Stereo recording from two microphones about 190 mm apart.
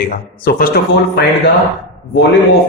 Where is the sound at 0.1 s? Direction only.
50° left (ahead or behind).